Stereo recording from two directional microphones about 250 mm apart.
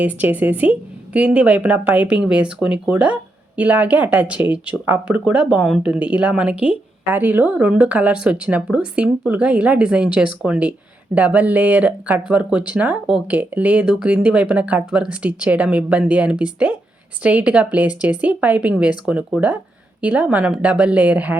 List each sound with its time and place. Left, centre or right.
0.0 s a woman's voice: centre